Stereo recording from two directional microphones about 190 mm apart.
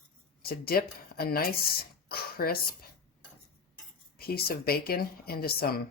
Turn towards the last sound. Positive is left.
turn(degrees=55)  # may be behind; listen again after turning